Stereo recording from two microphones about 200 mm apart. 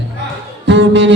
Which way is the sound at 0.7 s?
60° right (ahead or behind).